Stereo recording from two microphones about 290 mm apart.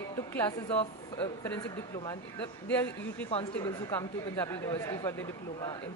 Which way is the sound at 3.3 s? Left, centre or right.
Centre.